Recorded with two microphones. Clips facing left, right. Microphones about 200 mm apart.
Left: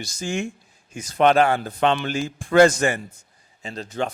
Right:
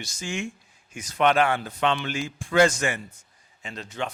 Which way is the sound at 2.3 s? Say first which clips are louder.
Left 8 dB; 55° left (ahead or behind).